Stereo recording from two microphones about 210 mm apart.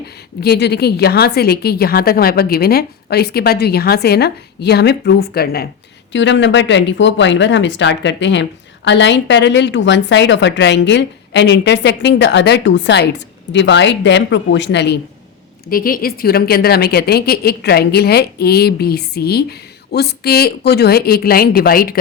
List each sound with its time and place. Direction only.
0.3 s a woman's voice: 50° left (ahead or behind)
6.1 s speech: 60° left (ahead or behind)
15.7 s a woman's voice: 45° left (ahead or behind)